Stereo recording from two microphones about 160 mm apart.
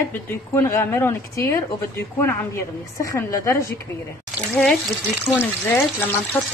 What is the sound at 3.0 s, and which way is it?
Speech, 20° left (ahead or behind).